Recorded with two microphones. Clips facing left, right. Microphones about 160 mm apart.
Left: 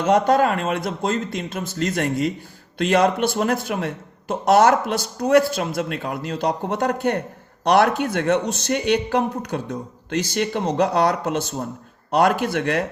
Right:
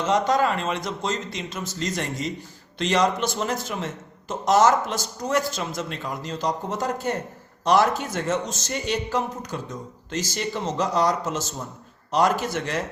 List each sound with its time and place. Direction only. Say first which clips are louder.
0.0 s speech: left 4 dB; 55° left (ahead or behind)